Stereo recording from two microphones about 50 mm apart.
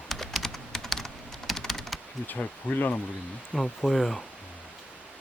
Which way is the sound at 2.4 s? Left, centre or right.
Left.